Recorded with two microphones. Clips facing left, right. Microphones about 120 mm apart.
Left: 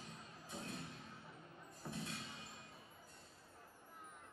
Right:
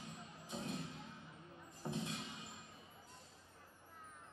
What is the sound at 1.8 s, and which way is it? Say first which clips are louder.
Music: right 4 dB; 20° right (ahead or behind).